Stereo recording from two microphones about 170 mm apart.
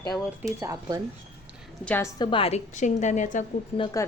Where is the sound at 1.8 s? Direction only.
10° left (ahead or behind).